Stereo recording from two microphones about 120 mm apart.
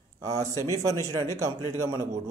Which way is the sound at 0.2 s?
25° right (ahead or behind).